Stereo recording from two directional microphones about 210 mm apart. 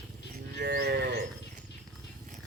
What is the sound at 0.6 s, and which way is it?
Livestock, 50° right (ahead or behind).